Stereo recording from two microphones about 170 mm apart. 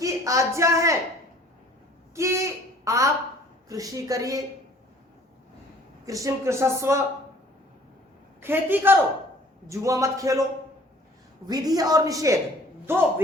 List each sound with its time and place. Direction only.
0.0 s speech: 20° right (ahead or behind)
2.1 s a woman's voice: 15° right (ahead or behind)
6.1 s speech: 20° right (ahead or behind)
8.4 s a woman's voice: 15° right (ahead or behind)
11.4 s a woman's voice: 20° right (ahead or behind)